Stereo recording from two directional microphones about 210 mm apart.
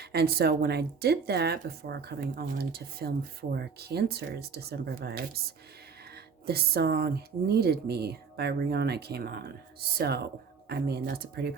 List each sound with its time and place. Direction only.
0.0 s speech: 50° right (ahead or behind)
6.4 s speech: 45° right (ahead or behind)
10.7 s speech: 50° right (ahead or behind)